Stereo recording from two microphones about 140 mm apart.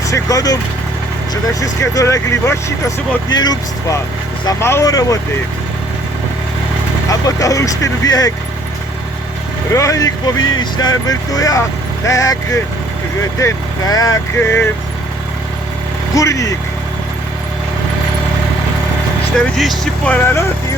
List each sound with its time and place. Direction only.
0.1 s speech: 25° left (ahead or behind)
1.6 s speech: 25° left (ahead or behind)
7.1 s speech: 25° left (ahead or behind)
9.7 s speech: 25° left (ahead or behind)
14.3 s speech: 15° left (ahead or behind)
16.1 s speech: 25° left (ahead or behind)
19.5 s speech: centre (ahead or behind)
20.1 s speech: 15° left (ahead or behind)